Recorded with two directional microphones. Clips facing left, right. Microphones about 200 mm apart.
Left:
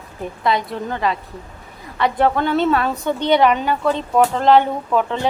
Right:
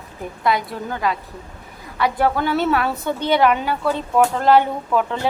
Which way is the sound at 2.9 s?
20° left (ahead or behind).